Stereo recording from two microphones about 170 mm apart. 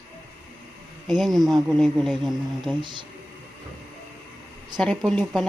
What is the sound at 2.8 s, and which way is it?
Speech, 25° right (ahead or behind).